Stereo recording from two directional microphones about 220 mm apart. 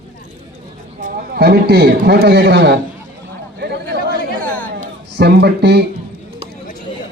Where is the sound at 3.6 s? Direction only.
50° right (ahead or behind).